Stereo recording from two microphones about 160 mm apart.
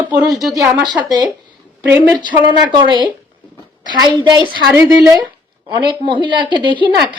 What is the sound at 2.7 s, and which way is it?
A woman's voice, 30° right (ahead or behind).